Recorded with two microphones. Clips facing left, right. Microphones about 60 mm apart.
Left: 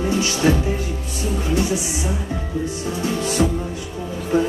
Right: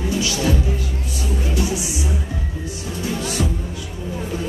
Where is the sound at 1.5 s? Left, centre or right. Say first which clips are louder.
Left 2 dB; left.